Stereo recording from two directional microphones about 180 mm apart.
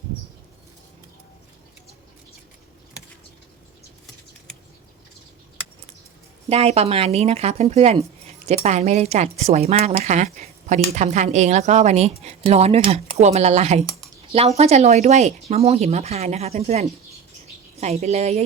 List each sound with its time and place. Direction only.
6.5 s speech: 35° right (ahead or behind)